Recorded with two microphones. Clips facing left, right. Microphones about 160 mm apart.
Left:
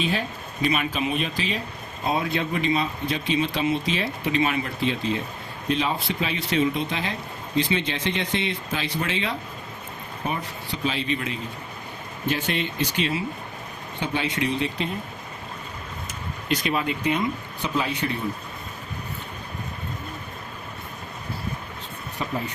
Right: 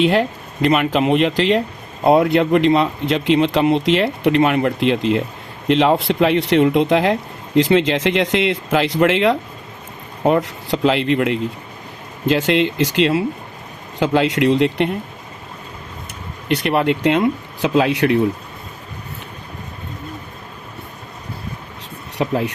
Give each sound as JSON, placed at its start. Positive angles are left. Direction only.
{"t": 0.0, "sound": "speech", "side_deg": -80}
{"t": 2.0, "sound": "speech", "side_deg": -70}
{"t": 12.2, "sound": "speech", "side_deg": -90}
{"t": 16.5, "sound": "speech", "side_deg": -65}
{"t": 22.2, "sound": "speech", "side_deg": -80}